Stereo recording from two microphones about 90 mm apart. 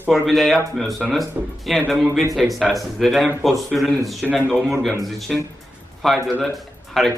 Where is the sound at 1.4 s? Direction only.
15° right (ahead or behind).